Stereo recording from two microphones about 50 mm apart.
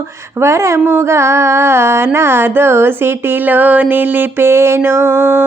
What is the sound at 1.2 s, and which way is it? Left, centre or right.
Speech, right.